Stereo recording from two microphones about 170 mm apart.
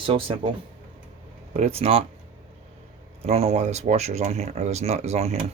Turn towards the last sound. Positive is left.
turn(degrees=-35)  # may be behind; listen again after turning